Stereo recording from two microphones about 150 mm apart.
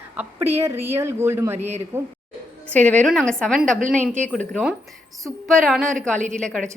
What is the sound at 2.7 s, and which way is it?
A woman's voice, 10° left (ahead or behind).